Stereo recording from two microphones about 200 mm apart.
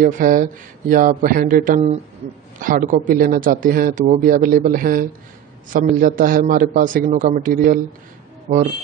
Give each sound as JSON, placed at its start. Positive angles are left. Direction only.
{"t": 0.0, "sound": "speech", "side_deg": -45}